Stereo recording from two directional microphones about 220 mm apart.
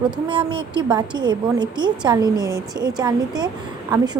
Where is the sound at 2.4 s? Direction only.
15° left (ahead or behind).